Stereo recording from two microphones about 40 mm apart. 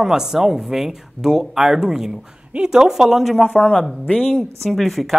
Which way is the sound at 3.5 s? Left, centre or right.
Left.